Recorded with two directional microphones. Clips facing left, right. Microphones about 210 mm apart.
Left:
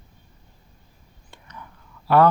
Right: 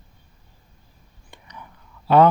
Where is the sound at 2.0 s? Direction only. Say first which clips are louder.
Right 2 dB; 20° right (ahead or behind).